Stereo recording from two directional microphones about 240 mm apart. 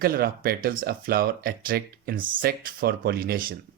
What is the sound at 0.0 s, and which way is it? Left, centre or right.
Speech, right.